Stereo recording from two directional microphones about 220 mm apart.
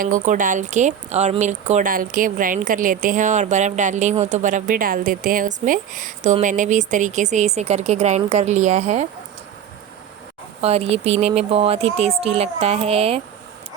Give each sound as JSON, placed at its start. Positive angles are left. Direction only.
{"t": 0.0, "sound": "speech", "side_deg": -35}
{"t": 10.6, "sound": "speech", "side_deg": -30}